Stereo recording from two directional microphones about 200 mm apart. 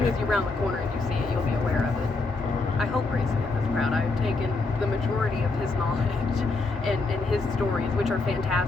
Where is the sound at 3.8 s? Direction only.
Centre (ahead or behind).